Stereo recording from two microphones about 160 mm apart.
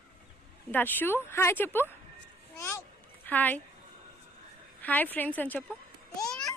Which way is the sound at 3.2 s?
10° left (ahead or behind).